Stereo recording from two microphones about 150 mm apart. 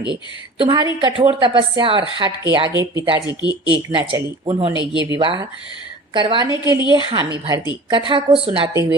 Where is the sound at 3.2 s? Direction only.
30° left (ahead or behind).